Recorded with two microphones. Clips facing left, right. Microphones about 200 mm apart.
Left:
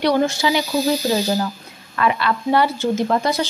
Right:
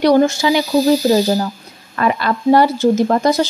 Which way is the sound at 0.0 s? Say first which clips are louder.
Right 5 dB; 45° right (ahead or behind).